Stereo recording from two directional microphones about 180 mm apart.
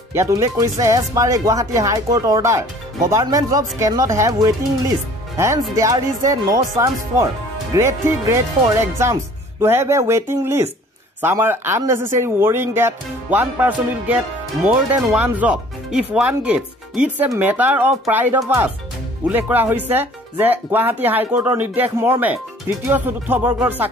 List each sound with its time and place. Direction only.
0.1 s speech: 15° right (ahead or behind)